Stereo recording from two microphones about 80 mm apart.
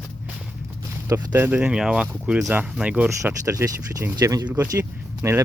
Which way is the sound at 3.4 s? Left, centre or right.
Right.